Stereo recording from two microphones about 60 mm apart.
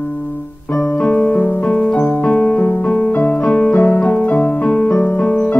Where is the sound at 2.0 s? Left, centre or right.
Centre.